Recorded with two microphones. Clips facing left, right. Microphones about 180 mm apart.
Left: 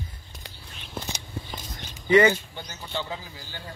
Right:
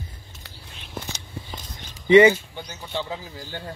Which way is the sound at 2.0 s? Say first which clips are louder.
Right 5 dB; 20° right (ahead or behind).